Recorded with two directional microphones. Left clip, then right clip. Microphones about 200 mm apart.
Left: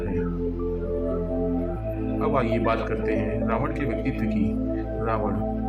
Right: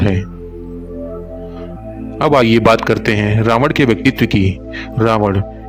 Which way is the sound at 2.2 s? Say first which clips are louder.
Right 14 dB; 55° right (ahead or behind).